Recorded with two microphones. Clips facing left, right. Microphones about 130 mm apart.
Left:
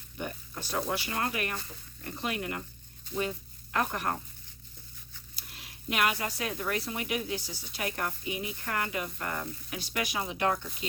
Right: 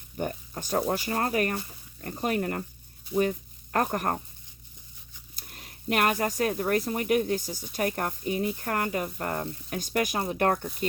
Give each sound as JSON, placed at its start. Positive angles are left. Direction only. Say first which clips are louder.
{"t": 0.2, "sound": "speech", "louder": "right 6 dB", "side_deg": -40}
{"t": 3.7, "sound": "speech", "louder": "right 4 dB", "side_deg": -45}
{"t": 5.4, "sound": "speech", "louder": "right 3 dB", "side_deg": -45}